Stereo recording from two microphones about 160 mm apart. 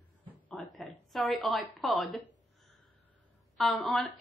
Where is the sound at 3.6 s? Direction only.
Centre (ahead or behind).